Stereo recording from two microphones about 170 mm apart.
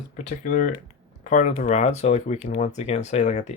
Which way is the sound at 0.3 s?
50° left (ahead or behind).